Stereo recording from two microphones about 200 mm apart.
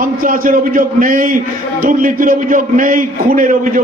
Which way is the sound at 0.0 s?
45° right (ahead or behind).